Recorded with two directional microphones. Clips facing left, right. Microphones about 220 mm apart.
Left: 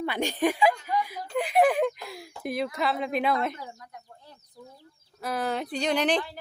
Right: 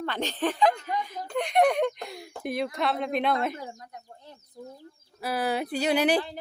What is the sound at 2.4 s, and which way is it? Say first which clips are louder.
Speech: even; centre (ahead or behind).